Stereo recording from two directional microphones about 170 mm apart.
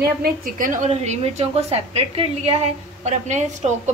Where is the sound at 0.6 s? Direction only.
45° right (ahead or behind).